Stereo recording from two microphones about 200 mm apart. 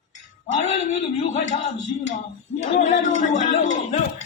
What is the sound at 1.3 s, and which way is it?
A woman's voice, 35° left (ahead or behind).